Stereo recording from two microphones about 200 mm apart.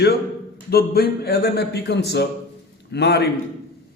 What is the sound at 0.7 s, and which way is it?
A man's voice, 50° left (ahead or behind).